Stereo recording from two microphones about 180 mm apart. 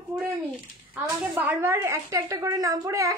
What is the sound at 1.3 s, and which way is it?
A woman's voice, 10° right (ahead or behind).